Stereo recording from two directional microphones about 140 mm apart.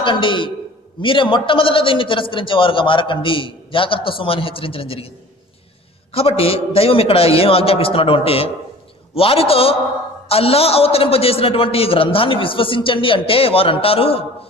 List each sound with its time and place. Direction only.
0.0 s a man's voice: 35° left (ahead or behind)
6.1 s a man's voice: 40° left (ahead or behind)